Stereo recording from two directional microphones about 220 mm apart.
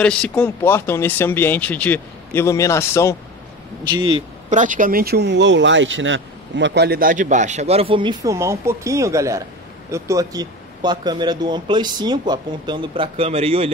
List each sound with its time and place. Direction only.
0.0 s speech: 5° left (ahead or behind)
3.9 s speech: 20° right (ahead or behind)
4.5 s speech: 35° right (ahead or behind)